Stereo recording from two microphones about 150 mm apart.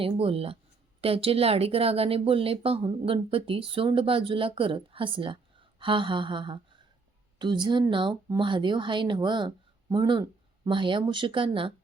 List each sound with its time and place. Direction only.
0.0 s speech: 40° right (ahead or behind)